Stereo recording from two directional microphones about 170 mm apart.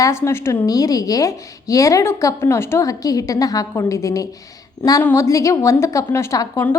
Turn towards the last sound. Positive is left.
turn(degrees=15)  # may be behind; listen again after turning